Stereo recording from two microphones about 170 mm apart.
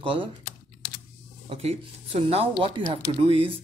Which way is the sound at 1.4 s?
35° right (ahead or behind).